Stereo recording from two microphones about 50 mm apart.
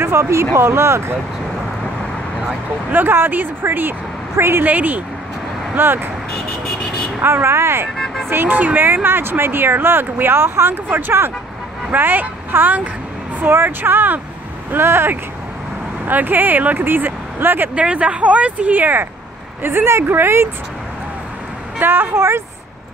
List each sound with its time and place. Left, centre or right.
0.0 s speech: right
2.9 s speech: right
4.6 s speech: right
5.8 s speech: right
7.2 s speech: right
8.3 s speech: right
14.7 s speech: right
16.1 s speech: right
17.7 s speech: right
19.6 s speech: right
21.7 s speech: right